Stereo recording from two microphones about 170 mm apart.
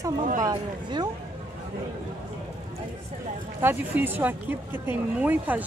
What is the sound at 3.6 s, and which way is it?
Speech, 10° right (ahead or behind).